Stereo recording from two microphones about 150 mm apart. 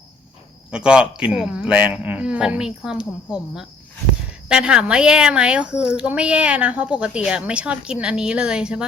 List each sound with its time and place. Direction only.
0.7 s a child's voice: 5° right (ahead or behind)